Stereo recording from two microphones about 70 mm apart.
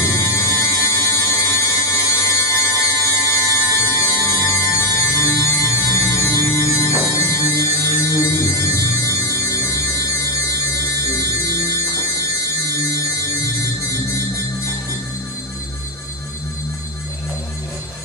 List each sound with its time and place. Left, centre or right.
0.0 s music: left